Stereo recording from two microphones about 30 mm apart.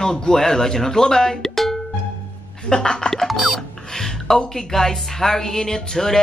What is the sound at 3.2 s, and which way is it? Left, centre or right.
Music, centre.